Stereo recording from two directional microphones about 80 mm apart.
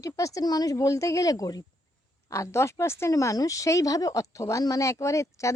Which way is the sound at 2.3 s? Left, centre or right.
Left.